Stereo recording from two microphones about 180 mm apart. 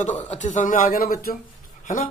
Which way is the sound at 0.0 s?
40° left (ahead or behind).